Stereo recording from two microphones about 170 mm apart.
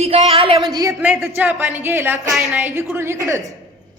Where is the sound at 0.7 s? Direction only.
20° right (ahead or behind).